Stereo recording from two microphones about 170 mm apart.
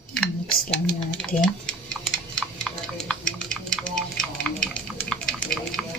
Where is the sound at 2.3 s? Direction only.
5° left (ahead or behind).